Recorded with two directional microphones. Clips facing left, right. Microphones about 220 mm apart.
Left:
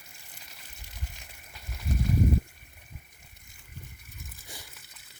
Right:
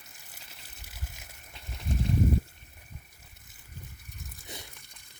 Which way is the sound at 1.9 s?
30° right (ahead or behind).